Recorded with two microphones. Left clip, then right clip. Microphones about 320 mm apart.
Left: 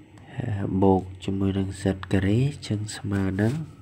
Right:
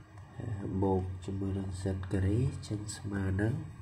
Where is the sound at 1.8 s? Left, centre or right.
Left.